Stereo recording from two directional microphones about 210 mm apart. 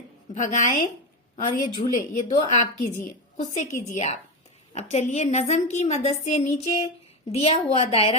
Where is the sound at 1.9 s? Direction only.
35° left (ahead or behind).